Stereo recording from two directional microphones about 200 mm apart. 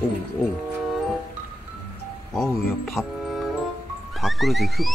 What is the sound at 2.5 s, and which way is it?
Speech, centre (ahead or behind).